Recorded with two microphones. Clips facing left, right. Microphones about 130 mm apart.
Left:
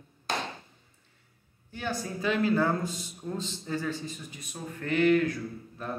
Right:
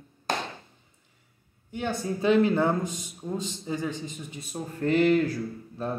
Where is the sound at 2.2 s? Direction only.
25° right (ahead or behind).